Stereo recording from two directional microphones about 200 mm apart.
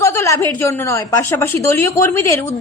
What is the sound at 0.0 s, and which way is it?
A woman's voice, 15° left (ahead or behind).